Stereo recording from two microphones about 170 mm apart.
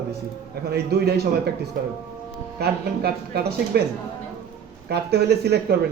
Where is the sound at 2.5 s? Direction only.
70° right (ahead or behind).